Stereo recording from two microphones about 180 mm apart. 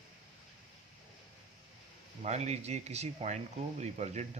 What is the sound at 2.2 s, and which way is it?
Speech, 40° right (ahead or behind).